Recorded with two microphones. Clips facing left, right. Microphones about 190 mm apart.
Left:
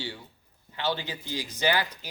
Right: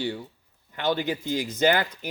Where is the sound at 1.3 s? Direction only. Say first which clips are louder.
Right 4 dB; 50° right (ahead or behind).